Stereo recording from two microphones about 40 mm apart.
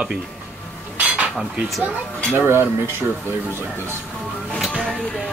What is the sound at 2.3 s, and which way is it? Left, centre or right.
Speech, right.